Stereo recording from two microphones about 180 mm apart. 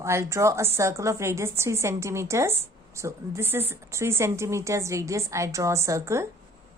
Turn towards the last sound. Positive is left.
turn(degrees=-15)  # may be behind; listen again after turning